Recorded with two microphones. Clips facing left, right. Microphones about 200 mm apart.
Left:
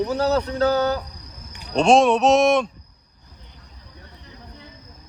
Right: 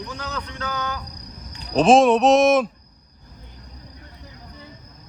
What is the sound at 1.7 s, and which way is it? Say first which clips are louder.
Speech: right 1 dB; centre (ahead or behind).